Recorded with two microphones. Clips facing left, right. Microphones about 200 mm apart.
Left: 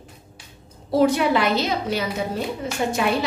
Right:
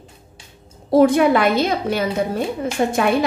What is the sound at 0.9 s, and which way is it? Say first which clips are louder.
A woman's voice: right 5 dB; 50° right (ahead or behind).